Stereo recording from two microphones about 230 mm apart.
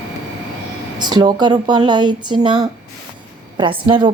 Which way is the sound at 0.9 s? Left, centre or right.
Centre.